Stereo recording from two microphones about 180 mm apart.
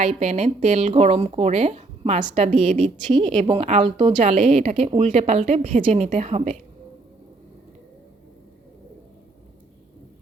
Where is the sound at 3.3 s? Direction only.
25° right (ahead or behind).